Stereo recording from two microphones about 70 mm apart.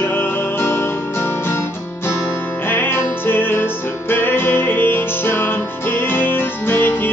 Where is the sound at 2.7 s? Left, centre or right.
Left.